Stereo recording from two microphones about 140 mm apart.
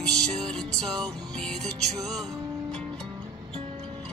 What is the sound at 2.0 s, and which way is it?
Music, 25° right (ahead or behind).